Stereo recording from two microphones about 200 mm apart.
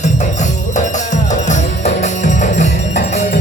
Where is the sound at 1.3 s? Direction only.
35° left (ahead or behind).